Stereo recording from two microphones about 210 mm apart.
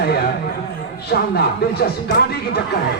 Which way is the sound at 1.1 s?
50° left (ahead or behind).